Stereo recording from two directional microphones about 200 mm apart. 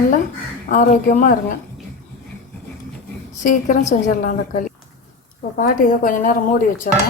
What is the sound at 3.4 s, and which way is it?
A woman's voice, 40° left (ahead or behind).